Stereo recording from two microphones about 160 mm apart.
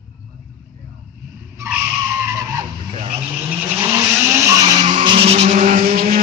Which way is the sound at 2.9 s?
40° right (ahead or behind).